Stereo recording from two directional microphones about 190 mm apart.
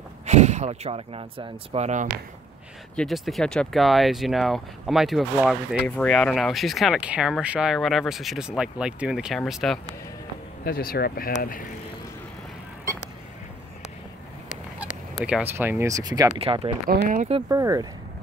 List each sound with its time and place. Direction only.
0.3 s speech: 35° right (ahead or behind)
3.0 s speech: centre (ahead or behind)
10.6 s speech: 50° left (ahead or behind)
15.2 s speech: 10° right (ahead or behind)
16.3 s speech: 30° right (ahead or behind)
16.8 s speech: 50° right (ahead or behind)
17.5 s speech: 15° right (ahead or behind)